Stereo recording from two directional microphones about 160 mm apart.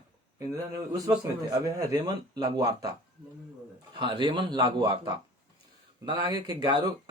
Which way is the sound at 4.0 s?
30° right (ahead or behind).